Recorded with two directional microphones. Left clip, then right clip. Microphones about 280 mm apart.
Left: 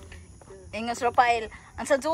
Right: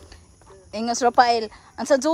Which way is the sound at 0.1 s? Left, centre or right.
Centre.